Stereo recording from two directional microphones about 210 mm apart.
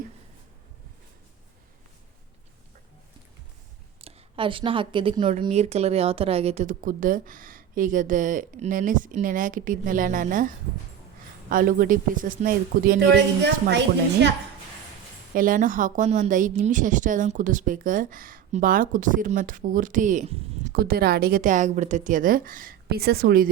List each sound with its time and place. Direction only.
4.0 s a woman's voice: 25° right (ahead or behind); by 14.3 s 55° right (ahead or behind)
15.4 s a woman's voice: 40° right (ahead or behind)